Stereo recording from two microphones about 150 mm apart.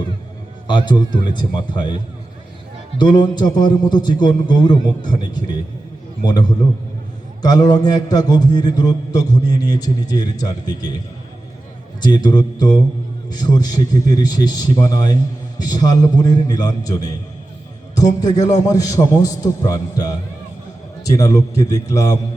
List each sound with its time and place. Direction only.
0.7 s speech: 30° left (ahead or behind)
3.0 s a man's voice: 30° left (ahead or behind)
11.9 s a man's voice: 30° left (ahead or behind)
18.2 s a man's voice: 25° left (ahead or behind)